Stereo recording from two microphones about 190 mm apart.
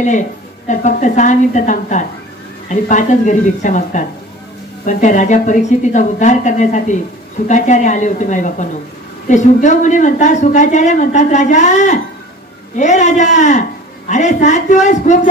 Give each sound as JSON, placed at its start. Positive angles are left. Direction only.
{"t": 0.7, "sound": "speech", "side_deg": 40}